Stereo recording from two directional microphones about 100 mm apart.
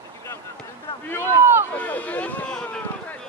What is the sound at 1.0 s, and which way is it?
Speech, 20° left (ahead or behind).